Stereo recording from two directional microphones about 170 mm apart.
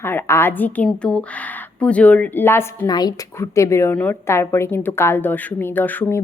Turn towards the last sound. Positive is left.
turn(degrees=10)  # may be behind; listen again after turning